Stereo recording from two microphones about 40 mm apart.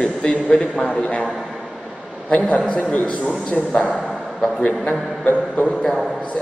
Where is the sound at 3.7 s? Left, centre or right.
Centre.